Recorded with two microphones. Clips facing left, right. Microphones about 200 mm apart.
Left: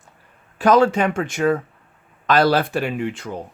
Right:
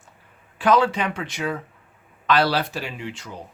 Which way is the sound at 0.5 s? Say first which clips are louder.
Left 4 dB; 45° left (ahead or behind).